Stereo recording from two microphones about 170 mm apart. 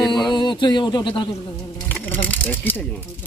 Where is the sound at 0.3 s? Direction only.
25° left (ahead or behind).